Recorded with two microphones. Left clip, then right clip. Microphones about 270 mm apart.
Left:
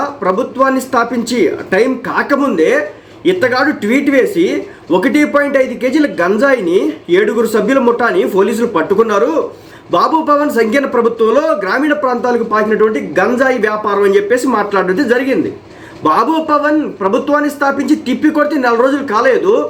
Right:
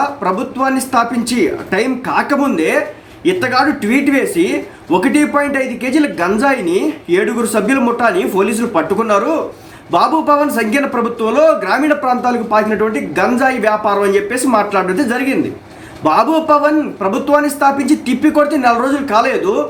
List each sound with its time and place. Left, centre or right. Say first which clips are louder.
0.2 s speech: left 3 dB; centre